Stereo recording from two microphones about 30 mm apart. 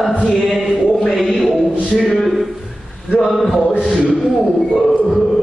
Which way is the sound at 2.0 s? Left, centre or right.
Left.